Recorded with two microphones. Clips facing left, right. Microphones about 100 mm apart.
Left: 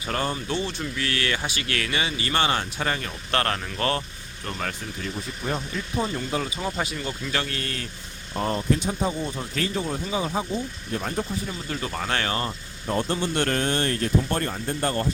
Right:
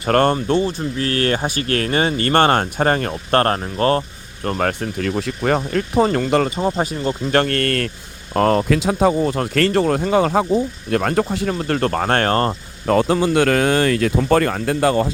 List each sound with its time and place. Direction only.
0.1 s speech: 60° right (ahead or behind)
0.3 s speech: 45° right (ahead or behind)
4.4 s speech: 50° right (ahead or behind); by 5.5 s 75° right (ahead or behind)
5.5 s speech: 65° right (ahead or behind)
6.6 s speech: 30° right (ahead or behind)
7.3 s speech: 55° right (ahead or behind)
8.3 s speech: 90° right; by 12.5 s 50° right (ahead or behind)
12.9 s speech: 90° right